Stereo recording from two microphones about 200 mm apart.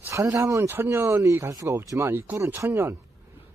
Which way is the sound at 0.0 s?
15° right (ahead or behind).